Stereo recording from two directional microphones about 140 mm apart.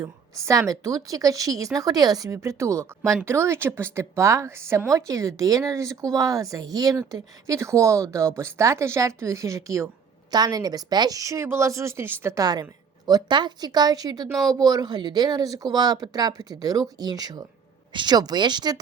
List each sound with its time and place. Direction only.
0.0 s speech: 25° right (ahead or behind)